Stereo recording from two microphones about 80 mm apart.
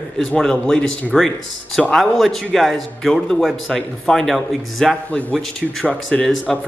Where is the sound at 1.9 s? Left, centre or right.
Centre.